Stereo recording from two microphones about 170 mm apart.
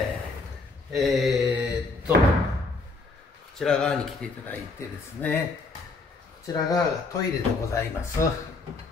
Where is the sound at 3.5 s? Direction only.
5° left (ahead or behind).